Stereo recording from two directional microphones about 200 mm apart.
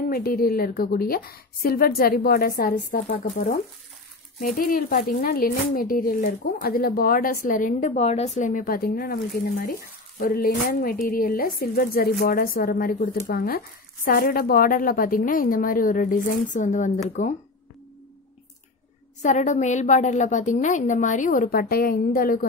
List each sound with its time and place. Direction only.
0.1 s a woman's voice: 45° left (ahead or behind)
19.2 s a woman's voice: 35° left (ahead or behind)